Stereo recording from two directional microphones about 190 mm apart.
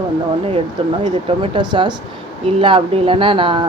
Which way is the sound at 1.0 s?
25° right (ahead or behind).